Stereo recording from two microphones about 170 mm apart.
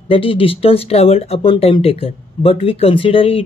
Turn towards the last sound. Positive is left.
turn(degrees=35)  # may be behind; listen again after turning